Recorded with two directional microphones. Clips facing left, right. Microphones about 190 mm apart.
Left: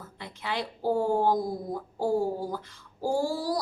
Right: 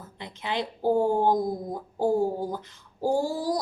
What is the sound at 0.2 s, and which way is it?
A woman's voice, 20° right (ahead or behind).